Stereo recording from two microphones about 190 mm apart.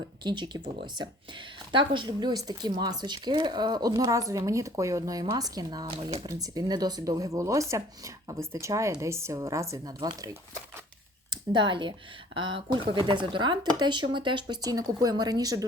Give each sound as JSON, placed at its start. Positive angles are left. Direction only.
{"t": 0.2, "sound": "speech", "side_deg": -25}
{"t": 1.7, "sound": "speech", "side_deg": -25}
{"t": 11.3, "sound": "speech", "side_deg": -25}